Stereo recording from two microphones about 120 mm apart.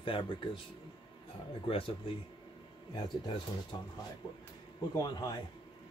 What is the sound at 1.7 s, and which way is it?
Speech, 50° left (ahead or behind).